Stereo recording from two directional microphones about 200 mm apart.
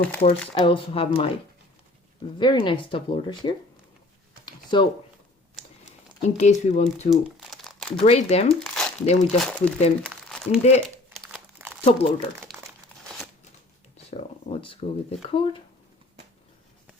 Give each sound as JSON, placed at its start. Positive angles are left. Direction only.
{"t": 0.2, "sound": "speech", "side_deg": 30}
{"t": 2.4, "sound": "speech", "side_deg": 25}
{"t": 4.4, "sound": "a sound", "side_deg": 25}
{"t": 6.2, "sound": "speech", "side_deg": 35}
{"t": 7.1, "sound": "crumpling", "side_deg": 0}
{"t": 8.0, "sound": "speech", "side_deg": 30}
{"t": 8.5, "sound": "crumpling", "side_deg": 5}
{"t": 9.0, "sound": "speech", "side_deg": 30}
{"t": 9.4, "sound": "speech", "side_deg": 5}
{"t": 10.0, "sound": "crumpling", "side_deg": 0}
{"t": 11.9, "sound": "speech", "side_deg": 30}
{"t": 14.1, "sound": "speech", "side_deg": 30}